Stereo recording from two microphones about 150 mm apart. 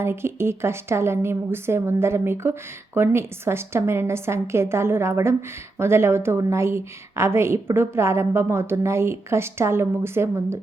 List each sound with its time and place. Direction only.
0.0 s a woman's voice: 15° right (ahead or behind)